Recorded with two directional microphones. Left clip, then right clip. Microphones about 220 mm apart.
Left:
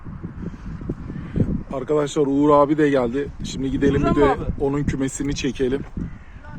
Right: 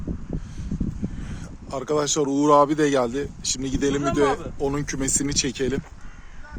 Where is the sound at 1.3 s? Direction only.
15° right (ahead or behind).